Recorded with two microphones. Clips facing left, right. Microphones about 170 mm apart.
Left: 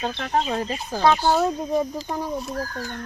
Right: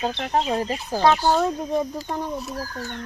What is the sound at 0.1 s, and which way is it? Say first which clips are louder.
Speech: right 1 dB; 25° right (ahead or behind).